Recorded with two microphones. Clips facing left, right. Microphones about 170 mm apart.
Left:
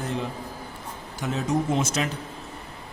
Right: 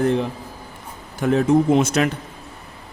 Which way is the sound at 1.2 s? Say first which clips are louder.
Right 9 dB; 55° right (ahead or behind).